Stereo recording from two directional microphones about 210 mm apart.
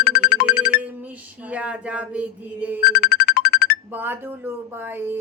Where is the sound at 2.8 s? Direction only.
45° left (ahead or behind).